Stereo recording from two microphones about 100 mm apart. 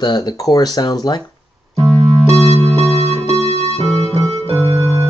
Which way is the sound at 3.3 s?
90° left.